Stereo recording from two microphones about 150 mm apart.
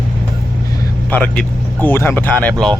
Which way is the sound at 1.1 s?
10° left (ahead or behind).